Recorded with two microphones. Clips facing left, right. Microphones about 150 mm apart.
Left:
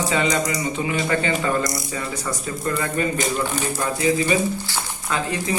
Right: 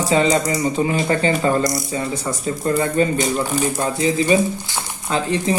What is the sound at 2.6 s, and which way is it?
A man's voice, 30° right (ahead or behind).